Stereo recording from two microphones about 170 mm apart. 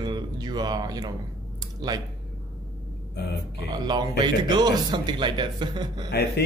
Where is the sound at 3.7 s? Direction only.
25° right (ahead or behind).